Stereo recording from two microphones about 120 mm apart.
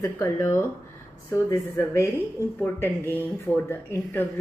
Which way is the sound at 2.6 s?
20° left (ahead or behind).